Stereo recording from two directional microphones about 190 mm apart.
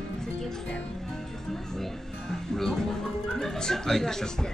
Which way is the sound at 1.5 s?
Centre (ahead or behind).